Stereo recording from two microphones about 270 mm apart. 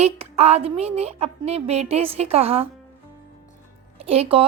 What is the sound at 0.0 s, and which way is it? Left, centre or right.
A woman's voice, right.